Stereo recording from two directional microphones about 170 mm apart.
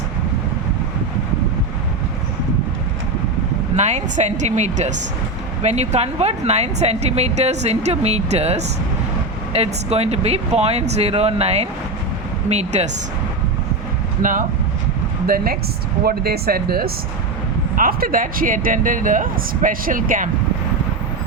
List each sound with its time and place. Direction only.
3.8 s speech: 40° right (ahead or behind)
14.2 s speech: 50° right (ahead or behind)
16.0 s speech: 65° right (ahead or behind)